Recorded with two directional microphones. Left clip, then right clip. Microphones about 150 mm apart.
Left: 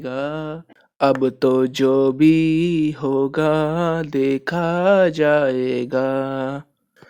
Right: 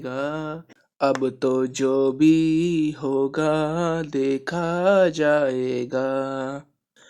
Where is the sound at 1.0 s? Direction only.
35° left (ahead or behind).